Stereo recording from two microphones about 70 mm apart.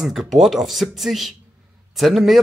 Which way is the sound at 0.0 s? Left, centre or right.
Centre.